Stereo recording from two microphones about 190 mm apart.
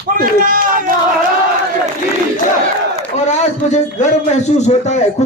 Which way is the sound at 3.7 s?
35° left (ahead or behind).